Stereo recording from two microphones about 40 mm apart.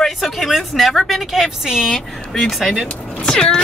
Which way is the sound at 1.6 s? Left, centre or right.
Centre.